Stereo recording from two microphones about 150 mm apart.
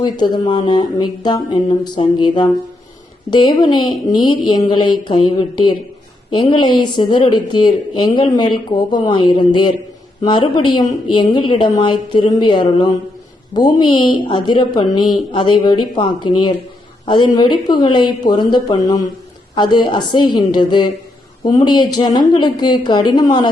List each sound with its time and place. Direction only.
0.0 s a woman's voice: 30° left (ahead or behind)